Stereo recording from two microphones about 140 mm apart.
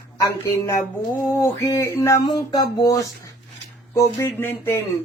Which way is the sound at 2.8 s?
25° left (ahead or behind).